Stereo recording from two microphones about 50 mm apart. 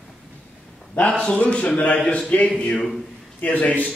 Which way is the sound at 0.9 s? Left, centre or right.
Left.